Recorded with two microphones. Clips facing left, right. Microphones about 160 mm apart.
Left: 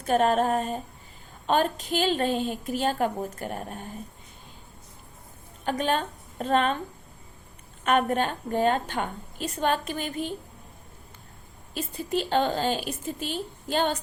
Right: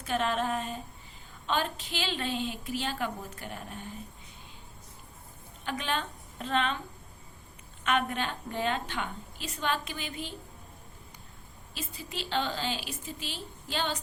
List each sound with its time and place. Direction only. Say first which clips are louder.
0.0 s a woman's voice: left 8 dB; 45° left (ahead or behind)
5.6 s a woman's voice: left 7 dB; 45° left (ahead or behind)
7.9 s a woman's voice: left 6 dB; 45° left (ahead or behind)
11.7 s a woman's voice: left 11 dB; 50° left (ahead or behind)